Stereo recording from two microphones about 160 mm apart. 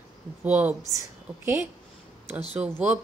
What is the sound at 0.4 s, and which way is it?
Speech, 10° right (ahead or behind).